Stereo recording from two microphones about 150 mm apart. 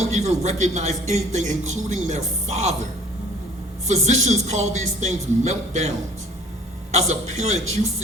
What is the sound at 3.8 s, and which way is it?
A man's voice, 50° right (ahead or behind).